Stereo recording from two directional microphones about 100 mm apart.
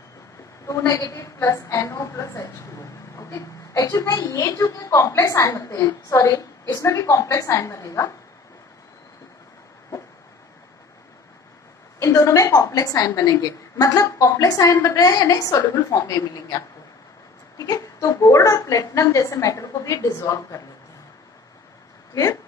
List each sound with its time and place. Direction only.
0.7 s a woman's voice: 35° left (ahead or behind)
12.0 s a woman's voice: 35° left (ahead or behind)
22.1 s speech: 35° left (ahead or behind)